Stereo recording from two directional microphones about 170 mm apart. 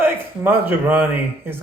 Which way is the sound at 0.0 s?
10° right (ahead or behind).